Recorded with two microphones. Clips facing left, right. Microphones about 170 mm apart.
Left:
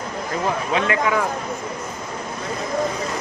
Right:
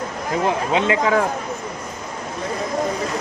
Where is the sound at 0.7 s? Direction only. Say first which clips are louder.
Right 2 dB; 25° right (ahead or behind).